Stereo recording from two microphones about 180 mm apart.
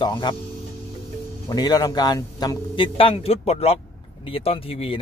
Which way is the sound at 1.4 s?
20° left (ahead or behind).